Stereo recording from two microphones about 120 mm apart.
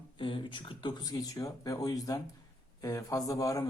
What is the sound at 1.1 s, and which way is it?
Speech, 30° left (ahead or behind).